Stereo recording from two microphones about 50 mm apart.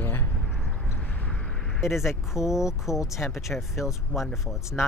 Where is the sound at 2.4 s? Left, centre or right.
Centre.